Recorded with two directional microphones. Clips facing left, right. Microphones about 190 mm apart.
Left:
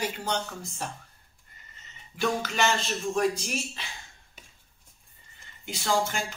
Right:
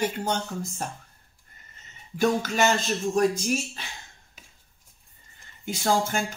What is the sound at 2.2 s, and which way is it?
Speech, 45° right (ahead or behind).